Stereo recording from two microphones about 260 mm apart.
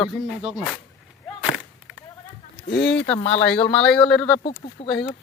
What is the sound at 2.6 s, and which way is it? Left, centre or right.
Speech, left.